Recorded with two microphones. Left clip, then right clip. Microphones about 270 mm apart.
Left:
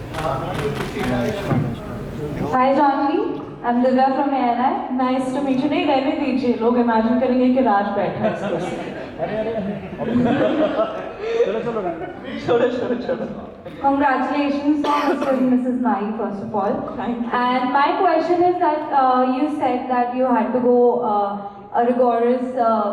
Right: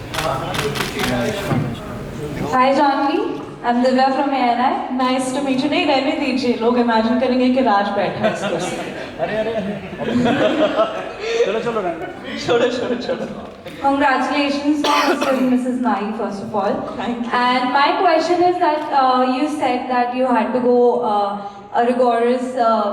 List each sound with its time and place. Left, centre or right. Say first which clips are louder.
0.2 s a sound: right 2 dB; centre
2.4 s a woman's voice: right 2 dB; centre
20.6 s speech: right 1 dB; left
22.1 s a woman's voice: right 1 dB; centre